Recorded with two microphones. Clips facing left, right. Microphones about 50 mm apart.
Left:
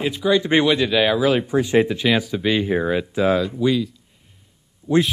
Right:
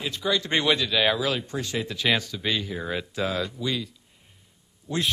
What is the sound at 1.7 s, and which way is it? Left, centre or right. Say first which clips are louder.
Speech: left 15 dB; left.